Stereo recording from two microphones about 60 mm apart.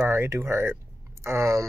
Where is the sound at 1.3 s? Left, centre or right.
Right.